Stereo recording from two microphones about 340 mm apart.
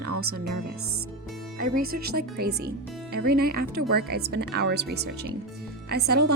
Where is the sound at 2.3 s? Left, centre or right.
Right.